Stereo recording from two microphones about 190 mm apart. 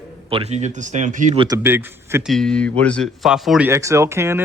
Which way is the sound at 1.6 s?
10° right (ahead or behind).